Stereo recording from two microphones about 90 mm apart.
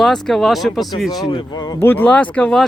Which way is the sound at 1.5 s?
50° left (ahead or behind).